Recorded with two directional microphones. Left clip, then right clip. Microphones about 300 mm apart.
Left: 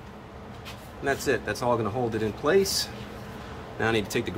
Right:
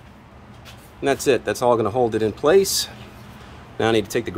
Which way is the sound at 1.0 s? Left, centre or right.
Right.